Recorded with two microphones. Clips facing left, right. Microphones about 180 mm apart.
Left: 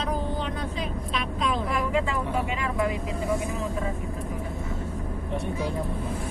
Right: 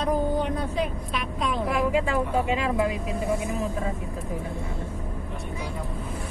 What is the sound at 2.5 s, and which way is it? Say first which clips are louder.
Speech: right 3 dB; 25° right (ahead or behind).